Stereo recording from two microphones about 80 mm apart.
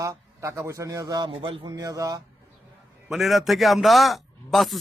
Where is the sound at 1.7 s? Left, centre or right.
Right.